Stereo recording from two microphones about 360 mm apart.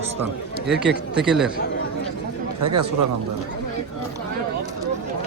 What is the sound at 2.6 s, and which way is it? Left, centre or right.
Speech, right.